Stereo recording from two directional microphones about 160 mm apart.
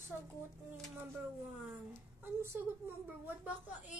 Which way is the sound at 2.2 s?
15° right (ahead or behind).